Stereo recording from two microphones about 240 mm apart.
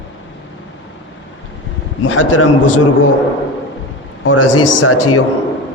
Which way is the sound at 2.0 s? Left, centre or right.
Left.